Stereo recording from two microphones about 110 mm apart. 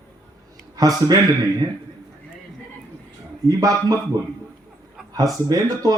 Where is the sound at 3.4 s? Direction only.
30° right (ahead or behind).